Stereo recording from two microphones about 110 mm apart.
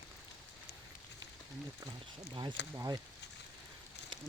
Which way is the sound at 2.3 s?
45° right (ahead or behind).